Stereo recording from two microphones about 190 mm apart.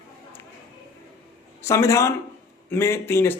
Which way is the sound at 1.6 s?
15° left (ahead or behind).